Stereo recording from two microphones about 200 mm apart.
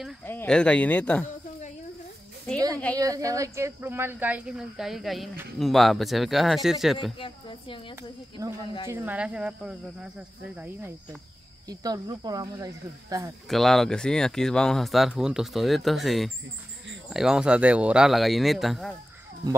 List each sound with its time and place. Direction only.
0.2 s speech: 10° left (ahead or behind)
2.7 s speech: 5° left (ahead or behind)
3.0 s speech: 15° right (ahead or behind); by 7.2 s centre (ahead or behind)
7.2 s a woman's voice: 25° left (ahead or behind)
8.9 s speech: 10° right (ahead or behind)
11.7 s speech: 20° right (ahead or behind)
13.5 s speech: centre (ahead or behind)